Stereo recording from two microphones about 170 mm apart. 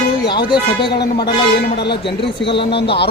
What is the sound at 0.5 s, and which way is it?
Speech, 30° left (ahead or behind).